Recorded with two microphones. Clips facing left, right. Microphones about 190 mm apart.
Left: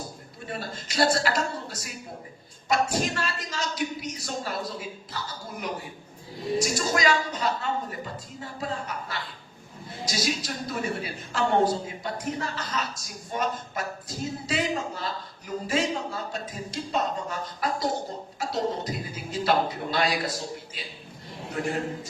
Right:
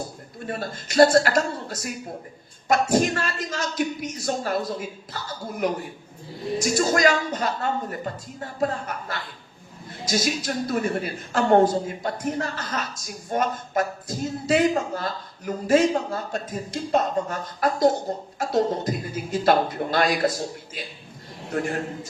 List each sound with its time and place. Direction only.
0.4 s a woman's voice: 50° right (ahead or behind)
21.5 s a woman's voice: 50° right (ahead or behind)